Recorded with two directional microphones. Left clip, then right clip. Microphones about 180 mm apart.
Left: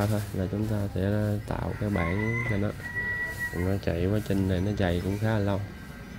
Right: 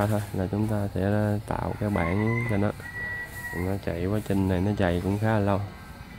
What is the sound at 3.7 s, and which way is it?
Speech, centre (ahead or behind).